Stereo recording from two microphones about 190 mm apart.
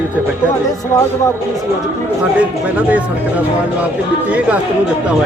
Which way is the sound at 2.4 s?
10° right (ahead or behind).